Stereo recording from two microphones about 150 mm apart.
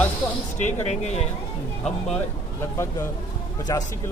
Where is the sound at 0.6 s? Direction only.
50° left (ahead or behind).